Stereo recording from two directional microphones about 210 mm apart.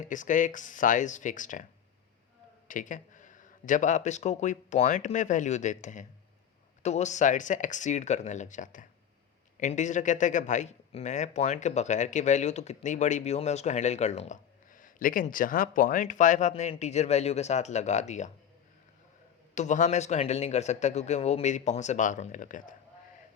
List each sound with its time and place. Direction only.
0.0 s speech: 35° left (ahead or behind)
2.6 s speech: 40° left (ahead or behind)
19.5 s speech: 35° left (ahead or behind)